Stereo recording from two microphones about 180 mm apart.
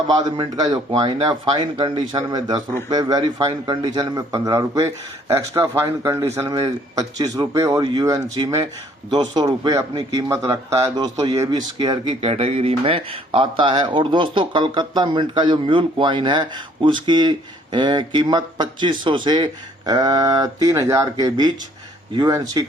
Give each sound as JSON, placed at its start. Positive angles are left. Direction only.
{"t": 0.1, "sound": "speech", "side_deg": -25}